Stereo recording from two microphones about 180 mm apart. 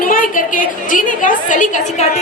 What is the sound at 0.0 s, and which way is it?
A woman's voice, 50° left (ahead or behind).